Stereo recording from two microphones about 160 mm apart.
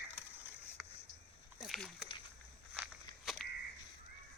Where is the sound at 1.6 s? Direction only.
Centre (ahead or behind).